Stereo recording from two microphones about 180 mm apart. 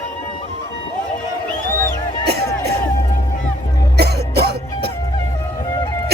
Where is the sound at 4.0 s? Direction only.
65° right (ahead or behind).